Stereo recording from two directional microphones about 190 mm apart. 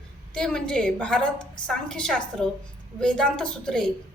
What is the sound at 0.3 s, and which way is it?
A woman's voice, 5° left (ahead or behind).